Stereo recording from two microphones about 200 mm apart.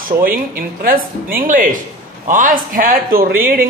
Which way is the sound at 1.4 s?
45° right (ahead or behind).